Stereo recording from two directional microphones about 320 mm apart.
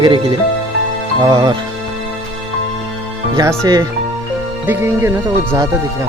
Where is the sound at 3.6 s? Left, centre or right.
Centre.